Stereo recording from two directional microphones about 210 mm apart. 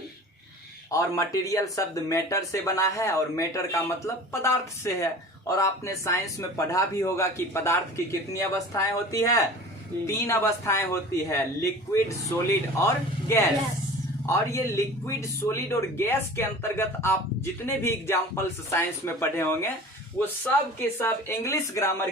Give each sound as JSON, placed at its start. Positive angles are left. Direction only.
{"t": 0.9, "sound": "speech", "side_deg": 15}